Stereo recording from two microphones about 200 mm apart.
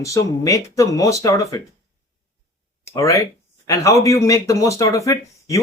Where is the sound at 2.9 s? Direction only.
15° left (ahead or behind).